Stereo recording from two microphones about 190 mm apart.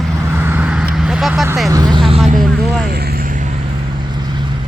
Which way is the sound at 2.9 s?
55° right (ahead or behind).